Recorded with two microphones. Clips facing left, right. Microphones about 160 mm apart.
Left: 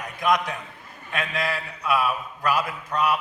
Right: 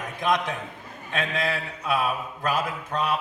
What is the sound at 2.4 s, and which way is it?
Speech, 25° right (ahead or behind).